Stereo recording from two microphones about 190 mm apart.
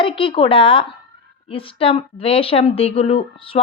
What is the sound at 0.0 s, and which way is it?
Speech, 25° left (ahead or behind).